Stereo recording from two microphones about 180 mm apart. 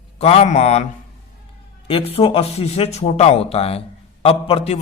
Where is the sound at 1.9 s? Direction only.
30° left (ahead or behind).